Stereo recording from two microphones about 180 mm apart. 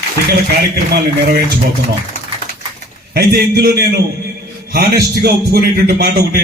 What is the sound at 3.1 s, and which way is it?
A man's voice, 60° right (ahead or behind).